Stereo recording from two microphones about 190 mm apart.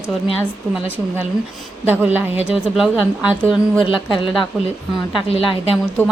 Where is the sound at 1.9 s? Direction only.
10° right (ahead or behind).